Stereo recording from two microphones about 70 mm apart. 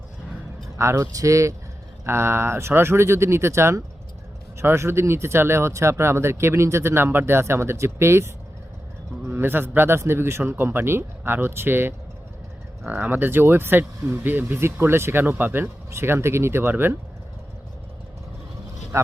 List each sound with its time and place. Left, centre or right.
0.8 s speech: right
2.0 s speech: right
18.9 s vehicle: right